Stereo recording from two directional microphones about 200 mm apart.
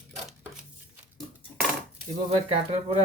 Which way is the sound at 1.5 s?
10° left (ahead or behind).